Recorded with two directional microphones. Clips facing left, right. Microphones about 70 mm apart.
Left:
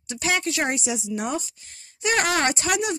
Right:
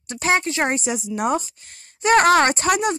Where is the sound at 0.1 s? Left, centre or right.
Right.